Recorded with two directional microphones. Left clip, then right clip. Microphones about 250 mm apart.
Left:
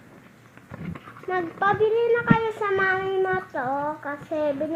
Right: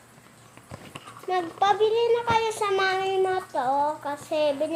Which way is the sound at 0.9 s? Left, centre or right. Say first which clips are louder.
Even; centre.